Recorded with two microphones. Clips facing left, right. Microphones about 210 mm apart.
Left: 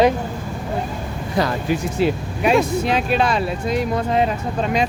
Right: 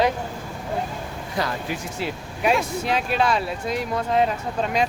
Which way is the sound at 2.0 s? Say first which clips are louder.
Left 11 dB; 20° left (ahead or behind).